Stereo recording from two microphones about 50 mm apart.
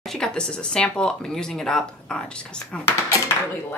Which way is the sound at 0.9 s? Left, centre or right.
Centre.